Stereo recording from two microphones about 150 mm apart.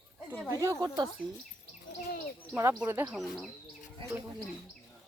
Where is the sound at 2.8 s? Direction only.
15° right (ahead or behind).